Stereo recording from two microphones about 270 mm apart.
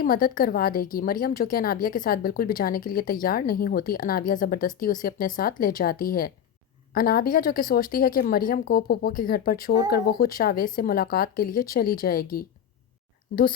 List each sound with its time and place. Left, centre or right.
0.0 s a woman's voice: left